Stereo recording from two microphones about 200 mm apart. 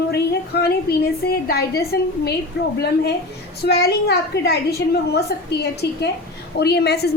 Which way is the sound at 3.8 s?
55° left (ahead or behind).